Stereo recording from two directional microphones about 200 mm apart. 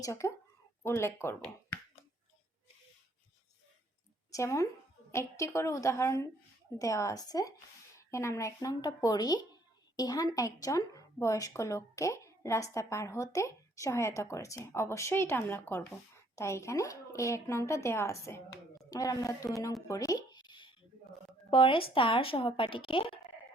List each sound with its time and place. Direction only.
0.0 s speech: 15° left (ahead or behind)
4.3 s a woman's voice: 15° left (ahead or behind)
19.9 s a sound: 15° left (ahead or behind)
21.5 s a woman's voice: 25° left (ahead or behind)